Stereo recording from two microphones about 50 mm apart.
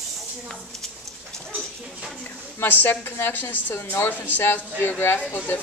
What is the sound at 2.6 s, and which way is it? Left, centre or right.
A woman's voice, left.